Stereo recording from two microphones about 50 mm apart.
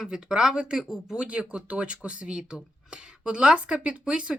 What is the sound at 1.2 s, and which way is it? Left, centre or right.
Speech, right.